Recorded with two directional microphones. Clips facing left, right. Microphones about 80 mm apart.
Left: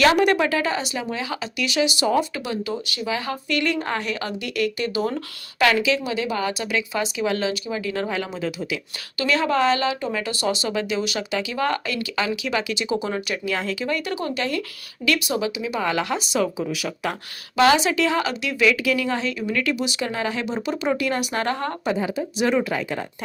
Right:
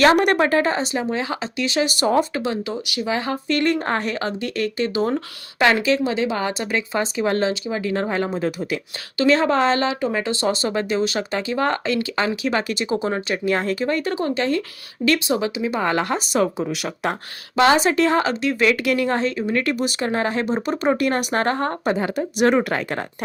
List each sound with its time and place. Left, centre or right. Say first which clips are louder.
0.2 s speech: right 2 dB; right
2.1 s speech: right 3 dB; right
9.1 s speech: right 4 dB; right
16.6 s speech: right 2 dB; right
17.7 s speech: right 3 dB; right
18.9 s a woman's voice: right 3 dB; right
19.4 s speech: right 3 dB; right
19.6 s speech: right 2 dB; right
21.9 s speech: right 2 dB; right